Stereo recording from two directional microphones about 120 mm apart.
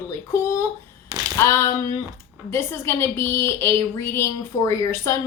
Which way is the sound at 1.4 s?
25° left (ahead or behind).